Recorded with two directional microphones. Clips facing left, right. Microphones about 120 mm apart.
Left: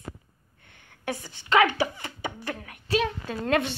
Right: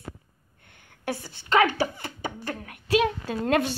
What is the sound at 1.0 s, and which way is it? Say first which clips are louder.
A woman's voice: right 1 dB; 35° right (ahead or behind).